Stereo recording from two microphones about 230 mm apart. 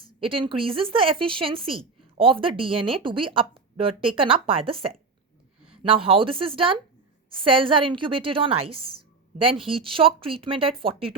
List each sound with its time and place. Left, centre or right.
0.0 s a woman's voice: right